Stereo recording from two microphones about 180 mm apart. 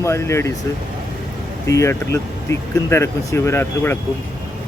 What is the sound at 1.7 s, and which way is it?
Speech, 15° left (ahead or behind).